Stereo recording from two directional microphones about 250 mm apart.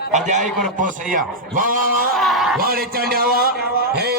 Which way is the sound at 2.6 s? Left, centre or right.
Right.